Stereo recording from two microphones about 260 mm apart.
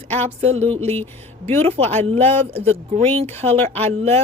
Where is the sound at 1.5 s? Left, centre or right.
Right.